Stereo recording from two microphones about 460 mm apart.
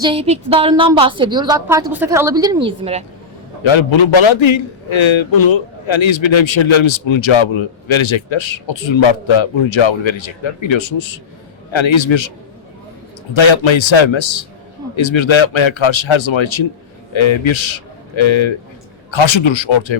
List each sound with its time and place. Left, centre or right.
0.0 s a woman's voice: centre
3.6 s a man's voice: left
13.3 s a man's voice: left